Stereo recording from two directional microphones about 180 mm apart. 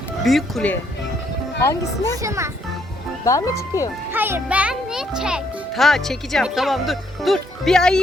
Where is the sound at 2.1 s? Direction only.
15° right (ahead or behind).